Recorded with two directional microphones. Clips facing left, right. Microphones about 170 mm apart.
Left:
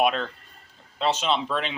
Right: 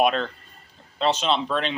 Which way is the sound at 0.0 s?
5° left (ahead or behind).